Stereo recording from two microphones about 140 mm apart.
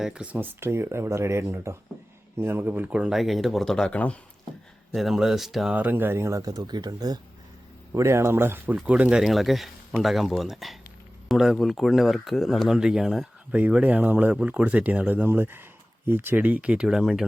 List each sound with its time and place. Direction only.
0.0 s speech: 5° right (ahead or behind); by 4.2 s 10° left (ahead or behind)
4.9 s speech: centre (ahead or behind); by 7.2 s 30° right (ahead or behind)
7.9 s speech: 20° right (ahead or behind); by 17.2 s 5° right (ahead or behind)